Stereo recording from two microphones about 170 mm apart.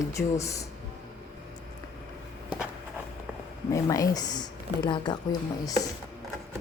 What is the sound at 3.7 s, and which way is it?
Speech, 20° left (ahead or behind).